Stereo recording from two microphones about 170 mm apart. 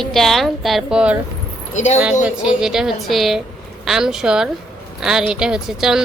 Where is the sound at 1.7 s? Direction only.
45° left (ahead or behind).